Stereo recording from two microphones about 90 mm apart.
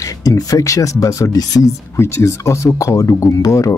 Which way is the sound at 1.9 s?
30° left (ahead or behind).